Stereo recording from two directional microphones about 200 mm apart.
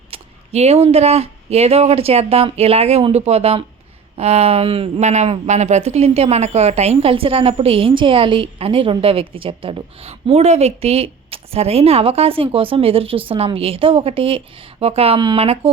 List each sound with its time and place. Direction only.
0.1 s a woman's voice: 30° right (ahead or behind)